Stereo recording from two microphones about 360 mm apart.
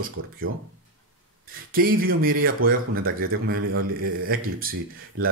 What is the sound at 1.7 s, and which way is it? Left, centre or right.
Speech, right.